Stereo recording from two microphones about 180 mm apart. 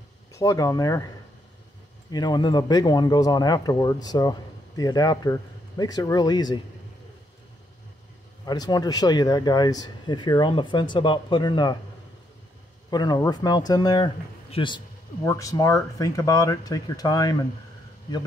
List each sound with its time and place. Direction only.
0.3 s speech: 15° left (ahead or behind)
2.0 s speech: 25° left (ahead or behind)
8.5 s speech: 20° left (ahead or behind)
12.9 s speech: 20° left (ahead or behind)